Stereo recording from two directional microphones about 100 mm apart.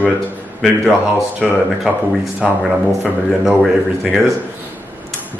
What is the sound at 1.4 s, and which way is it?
Speech, centre (ahead or behind).